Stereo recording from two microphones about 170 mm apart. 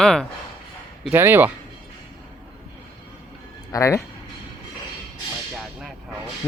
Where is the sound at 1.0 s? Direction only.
10° right (ahead or behind).